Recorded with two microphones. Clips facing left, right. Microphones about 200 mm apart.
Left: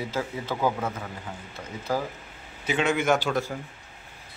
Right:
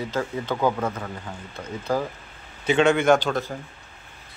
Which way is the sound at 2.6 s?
5° left (ahead or behind).